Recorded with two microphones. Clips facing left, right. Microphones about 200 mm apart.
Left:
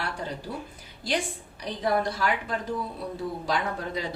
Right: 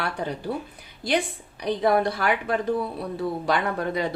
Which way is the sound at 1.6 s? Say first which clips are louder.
Right 5 dB; 60° right (ahead or behind).